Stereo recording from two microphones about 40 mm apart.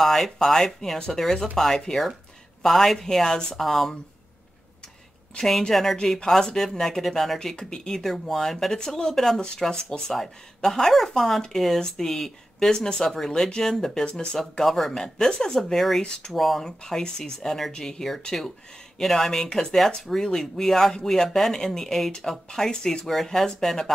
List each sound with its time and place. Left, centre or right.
0.0 s speech: centre
5.4 s speech: centre
7.5 s speech: centre
9.7 s speech: centre
15.7 s speech: centre
16.0 s speech: left
16.3 s speech: centre